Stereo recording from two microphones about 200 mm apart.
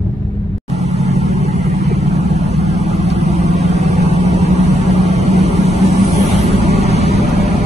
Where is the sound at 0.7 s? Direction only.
35° right (ahead or behind).